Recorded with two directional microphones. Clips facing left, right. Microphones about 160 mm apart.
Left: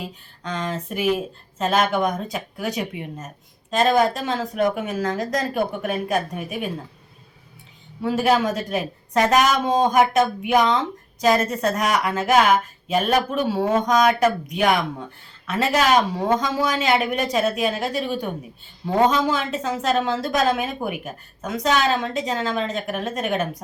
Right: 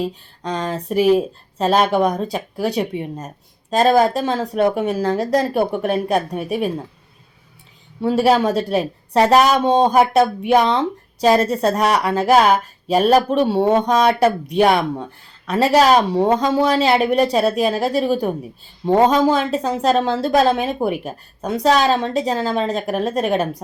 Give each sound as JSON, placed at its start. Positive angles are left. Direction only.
{"t": 0.0, "sound": "speech", "side_deg": -35}
{"t": 8.0, "sound": "speech", "side_deg": -35}